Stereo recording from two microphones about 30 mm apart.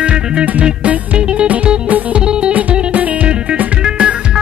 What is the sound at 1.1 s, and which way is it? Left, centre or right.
Music, right.